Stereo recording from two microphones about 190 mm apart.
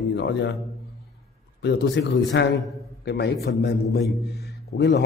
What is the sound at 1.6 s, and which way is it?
A man's voice, 70° left (ahead or behind).